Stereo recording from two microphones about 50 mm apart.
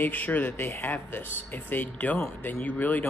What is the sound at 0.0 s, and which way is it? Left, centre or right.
Speech, left.